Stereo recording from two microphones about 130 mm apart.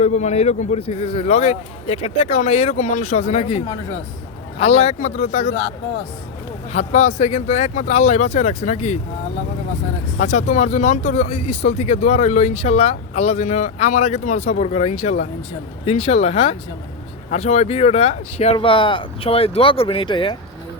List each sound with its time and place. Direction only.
0.0 s a man's voice: 60° left (ahead or behind)
6.7 s speech: 60° left (ahead or behind)
10.2 s speech: 65° left (ahead or behind)
15.8 s a man's voice: 50° left (ahead or behind)
18.5 s a man's voice: 40° left (ahead or behind)